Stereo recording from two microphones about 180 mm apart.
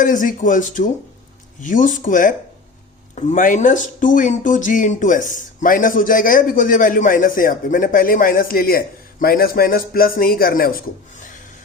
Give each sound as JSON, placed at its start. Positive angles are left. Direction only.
{"t": 0.0, "sound": "speech", "side_deg": 45}